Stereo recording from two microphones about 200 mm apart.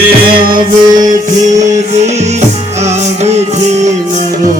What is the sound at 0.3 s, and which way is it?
Music, 45° right (ahead or behind).